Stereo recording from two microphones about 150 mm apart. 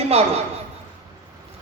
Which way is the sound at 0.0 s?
40° right (ahead or behind).